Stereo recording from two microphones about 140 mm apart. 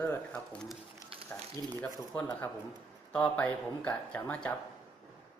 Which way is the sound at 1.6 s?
30° right (ahead or behind).